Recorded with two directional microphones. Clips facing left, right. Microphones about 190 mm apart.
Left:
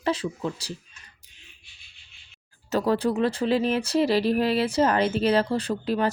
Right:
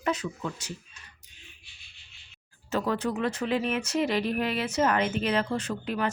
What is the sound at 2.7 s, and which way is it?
Speech, 35° left (ahead or behind).